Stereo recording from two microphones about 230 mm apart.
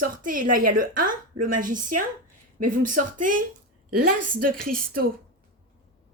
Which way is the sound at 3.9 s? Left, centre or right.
Right.